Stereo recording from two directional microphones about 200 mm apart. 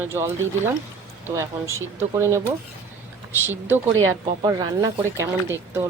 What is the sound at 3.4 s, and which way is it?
Speech, 10° right (ahead or behind).